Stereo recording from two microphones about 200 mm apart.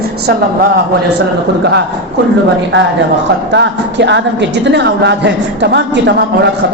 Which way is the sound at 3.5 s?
60° right (ahead or behind).